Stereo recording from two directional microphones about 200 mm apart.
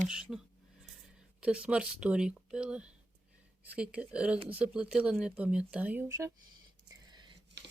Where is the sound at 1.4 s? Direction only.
5° right (ahead or behind).